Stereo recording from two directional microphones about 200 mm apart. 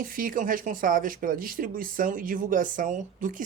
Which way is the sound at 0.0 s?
45° right (ahead or behind).